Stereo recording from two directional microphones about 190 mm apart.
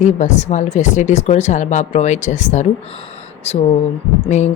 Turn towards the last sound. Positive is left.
turn(degrees=35)  # may be behind; listen again after turning